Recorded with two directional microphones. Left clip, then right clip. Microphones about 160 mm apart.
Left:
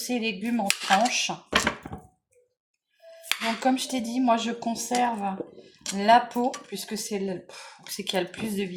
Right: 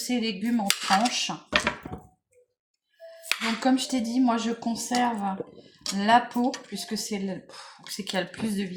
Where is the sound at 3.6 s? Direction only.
40° left (ahead or behind).